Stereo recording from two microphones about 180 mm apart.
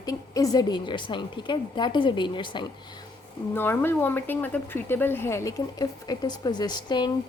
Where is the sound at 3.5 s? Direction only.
10° left (ahead or behind).